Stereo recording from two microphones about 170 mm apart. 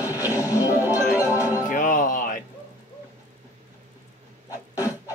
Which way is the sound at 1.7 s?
50° left (ahead or behind).